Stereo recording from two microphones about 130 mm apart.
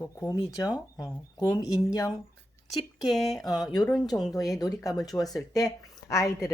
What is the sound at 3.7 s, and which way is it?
Speech, 30° left (ahead or behind).